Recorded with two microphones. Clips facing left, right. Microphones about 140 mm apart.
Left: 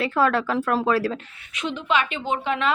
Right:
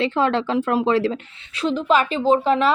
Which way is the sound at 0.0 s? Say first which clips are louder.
Right 1 dB; 25° right (ahead or behind).